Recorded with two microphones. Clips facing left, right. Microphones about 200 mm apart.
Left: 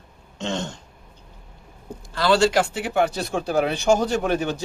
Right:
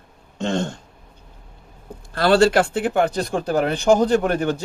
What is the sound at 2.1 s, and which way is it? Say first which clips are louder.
Speech: right 3 dB; 55° right (ahead or behind).